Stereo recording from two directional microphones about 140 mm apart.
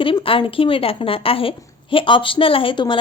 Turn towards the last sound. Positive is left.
turn(degrees=35)  # may be behind; listen again after turning